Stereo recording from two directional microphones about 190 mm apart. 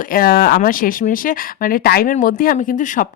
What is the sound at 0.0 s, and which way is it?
Speech, 50° left (ahead or behind).